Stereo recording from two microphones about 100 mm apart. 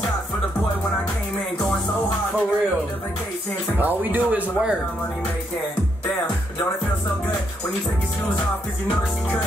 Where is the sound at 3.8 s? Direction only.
20° right (ahead or behind).